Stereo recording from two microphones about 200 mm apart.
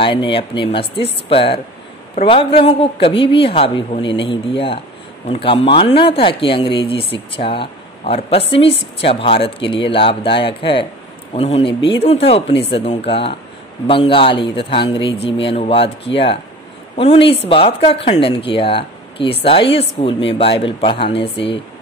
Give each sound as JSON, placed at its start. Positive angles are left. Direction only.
{"t": 0.0, "sound": "speech", "side_deg": 25}